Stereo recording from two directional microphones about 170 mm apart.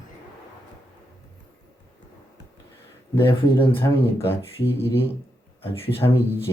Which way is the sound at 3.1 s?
15° left (ahead or behind).